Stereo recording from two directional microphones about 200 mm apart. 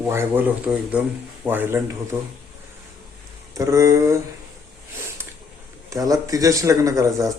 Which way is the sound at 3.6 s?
15° right (ahead or behind).